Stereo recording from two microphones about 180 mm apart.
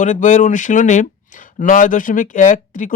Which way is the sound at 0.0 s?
45° left (ahead or behind).